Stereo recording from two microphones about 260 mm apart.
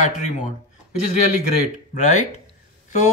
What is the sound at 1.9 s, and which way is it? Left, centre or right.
Speech, left.